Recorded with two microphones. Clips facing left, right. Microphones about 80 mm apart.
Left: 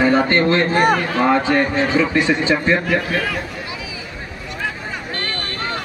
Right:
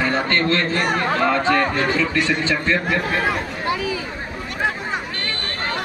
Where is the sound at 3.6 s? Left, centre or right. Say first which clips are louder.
Right 8 dB; right.